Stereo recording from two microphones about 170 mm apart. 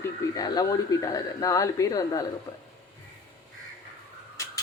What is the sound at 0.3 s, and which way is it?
Speech, 20° left (ahead or behind).